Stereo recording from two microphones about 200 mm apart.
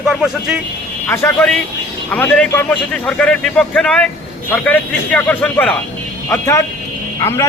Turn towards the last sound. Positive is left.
turn(degrees=15)  # may be behind; listen again after turning